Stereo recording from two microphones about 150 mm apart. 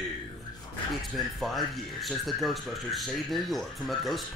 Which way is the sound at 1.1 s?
Centre (ahead or behind).